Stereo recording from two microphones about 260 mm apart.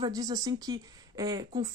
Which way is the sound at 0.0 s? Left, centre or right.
Centre.